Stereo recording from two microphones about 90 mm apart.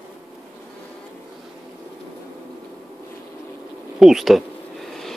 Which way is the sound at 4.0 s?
Centre (ahead or behind).